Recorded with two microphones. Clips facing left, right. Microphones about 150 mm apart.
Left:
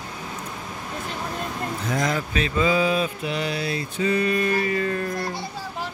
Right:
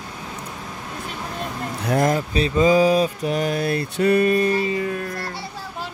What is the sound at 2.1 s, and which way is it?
Speech, 35° right (ahead or behind).